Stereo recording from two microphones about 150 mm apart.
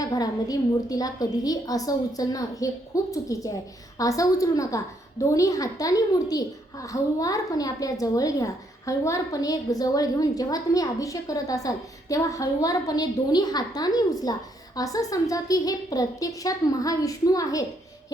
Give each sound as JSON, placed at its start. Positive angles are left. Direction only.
{"t": 0.0, "sound": "a woman's voice", "side_deg": 25}